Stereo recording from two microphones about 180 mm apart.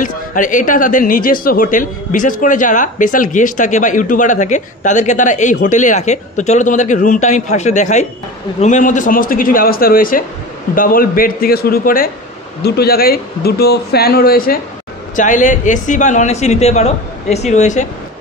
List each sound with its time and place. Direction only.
0.0 s a man's voice: 50° left (ahead or behind)
15.1 s a man's voice: 45° left (ahead or behind)